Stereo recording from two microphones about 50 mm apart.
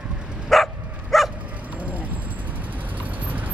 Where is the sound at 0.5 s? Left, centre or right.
Centre.